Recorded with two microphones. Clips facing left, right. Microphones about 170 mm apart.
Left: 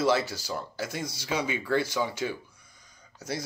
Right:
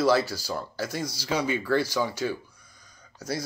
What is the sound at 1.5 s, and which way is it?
Speech, 20° left (ahead or behind).